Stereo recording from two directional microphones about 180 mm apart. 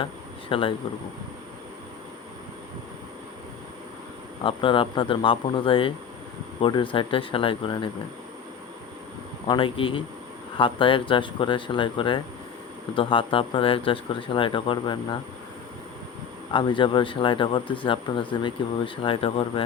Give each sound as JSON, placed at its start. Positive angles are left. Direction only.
{"t": 0.0, "sound": "a sound", "side_deg": 30}
{"t": 4.4, "sound": "speech", "side_deg": 30}
{"t": 9.5, "sound": "speech", "side_deg": 30}
{"t": 16.5, "sound": "speech", "side_deg": 30}